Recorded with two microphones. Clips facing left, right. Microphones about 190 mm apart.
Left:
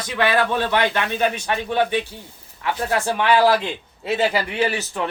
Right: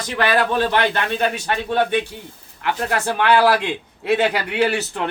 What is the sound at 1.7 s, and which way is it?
Speech, 55° right (ahead or behind).